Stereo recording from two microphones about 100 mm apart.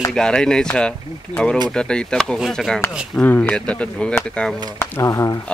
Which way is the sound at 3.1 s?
15° left (ahead or behind).